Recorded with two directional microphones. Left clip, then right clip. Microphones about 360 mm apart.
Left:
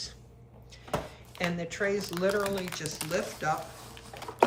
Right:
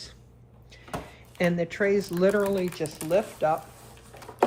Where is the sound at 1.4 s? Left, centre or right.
Right.